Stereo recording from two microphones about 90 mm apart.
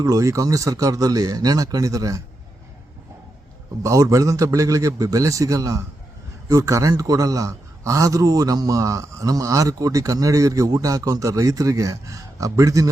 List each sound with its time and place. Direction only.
0.0 s a man's voice: 40° right (ahead or behind)
3.8 s a man's voice: 35° right (ahead or behind)